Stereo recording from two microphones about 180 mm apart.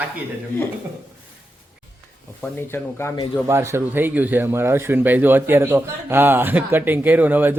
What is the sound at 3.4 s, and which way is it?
Speech, 15° right (ahead or behind).